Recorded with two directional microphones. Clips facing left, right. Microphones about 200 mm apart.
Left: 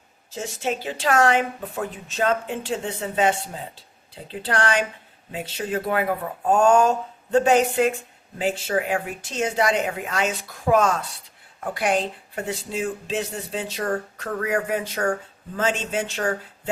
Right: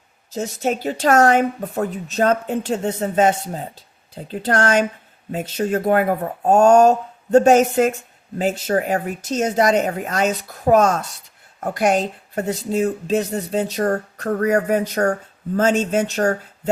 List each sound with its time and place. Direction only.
0.3 s speech: 40° right (ahead or behind)